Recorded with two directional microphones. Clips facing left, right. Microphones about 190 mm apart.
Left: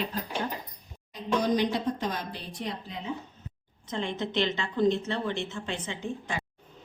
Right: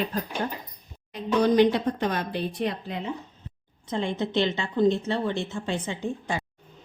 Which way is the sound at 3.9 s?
30° right (ahead or behind).